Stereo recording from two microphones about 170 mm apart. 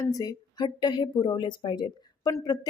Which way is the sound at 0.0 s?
20° left (ahead or behind).